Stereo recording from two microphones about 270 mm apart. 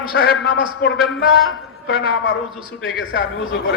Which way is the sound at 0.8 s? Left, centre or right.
Left.